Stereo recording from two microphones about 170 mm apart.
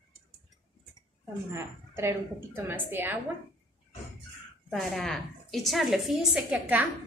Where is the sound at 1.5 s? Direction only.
15° right (ahead or behind).